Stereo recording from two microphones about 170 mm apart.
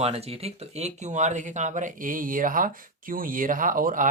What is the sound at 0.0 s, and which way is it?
Speech, 35° right (ahead or behind).